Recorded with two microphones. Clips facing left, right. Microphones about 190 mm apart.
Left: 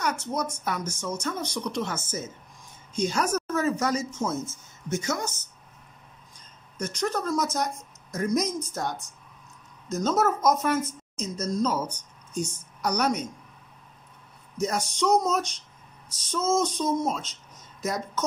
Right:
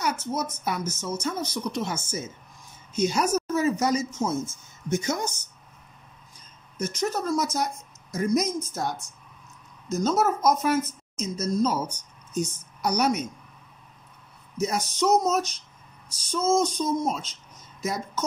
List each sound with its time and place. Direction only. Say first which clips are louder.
0.0 s a woman's voice: even; 5° right (ahead or behind)
6.8 s a woman's voice: right 1 dB; 5° right (ahead or behind)
14.6 s a woman's voice: right 1 dB; 5° right (ahead or behind)